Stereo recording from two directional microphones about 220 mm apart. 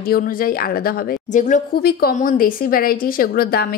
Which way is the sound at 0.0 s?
40° left (ahead or behind).